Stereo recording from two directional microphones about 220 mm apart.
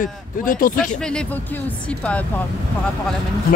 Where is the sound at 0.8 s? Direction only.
5° left (ahead or behind).